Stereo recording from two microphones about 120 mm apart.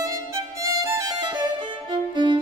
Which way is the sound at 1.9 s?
40° right (ahead or behind).